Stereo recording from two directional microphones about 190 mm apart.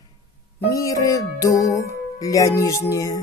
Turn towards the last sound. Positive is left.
turn(degrees=15)  # may be behind; listen again after turning